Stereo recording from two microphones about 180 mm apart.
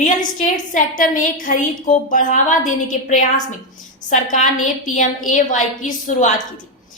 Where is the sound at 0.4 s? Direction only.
45° left (ahead or behind).